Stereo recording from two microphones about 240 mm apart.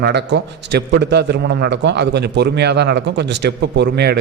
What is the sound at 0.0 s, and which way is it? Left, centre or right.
A man's voice, right.